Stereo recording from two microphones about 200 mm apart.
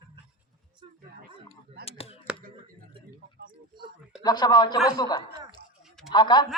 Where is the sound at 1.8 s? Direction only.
30° left (ahead or behind).